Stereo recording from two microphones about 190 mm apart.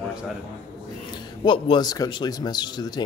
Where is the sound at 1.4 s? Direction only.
25° left (ahead or behind).